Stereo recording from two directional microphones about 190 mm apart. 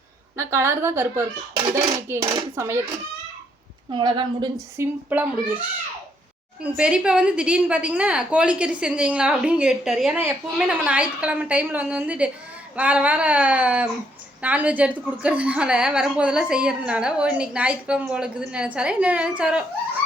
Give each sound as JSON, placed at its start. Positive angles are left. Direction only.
{"t": 0.3, "sound": "a woman's voice", "side_deg": -15}
{"t": 3.9, "sound": "a woman's voice", "side_deg": -25}